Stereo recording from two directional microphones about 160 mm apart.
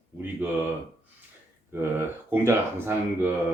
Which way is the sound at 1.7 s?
15° right (ahead or behind).